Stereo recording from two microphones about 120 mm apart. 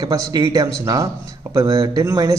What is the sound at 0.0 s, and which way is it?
A man's voice, 30° right (ahead or behind).